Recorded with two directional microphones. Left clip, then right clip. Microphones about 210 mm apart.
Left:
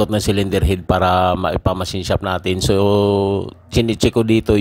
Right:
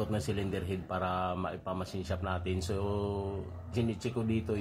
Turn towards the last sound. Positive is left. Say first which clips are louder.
# left 19 dB
turn(degrees=50)  # may be behind; listen again after turning